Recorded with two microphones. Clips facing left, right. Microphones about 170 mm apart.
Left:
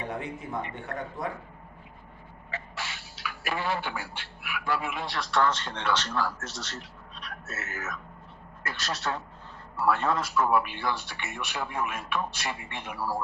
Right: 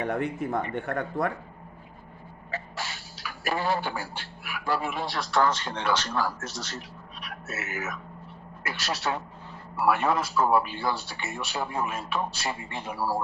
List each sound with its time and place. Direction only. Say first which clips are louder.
0.0 s speech: right 7 dB; 60° right (ahead or behind)
2.5 s speech: right 3 dB; 40° right (ahead or behind)
5.5 s speech: right 2 dB; 10° right (ahead or behind)
7.2 s a sound: right 3 dB; 10° right (ahead or behind)
8.6 s speech: right 2 dB; 5° right (ahead or behind)
10.2 s a man's voice: right 2 dB; 30° right (ahead or behind)